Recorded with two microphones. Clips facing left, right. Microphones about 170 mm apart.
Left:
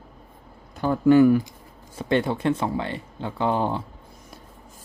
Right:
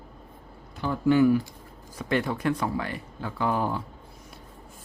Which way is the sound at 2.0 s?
30° left (ahead or behind).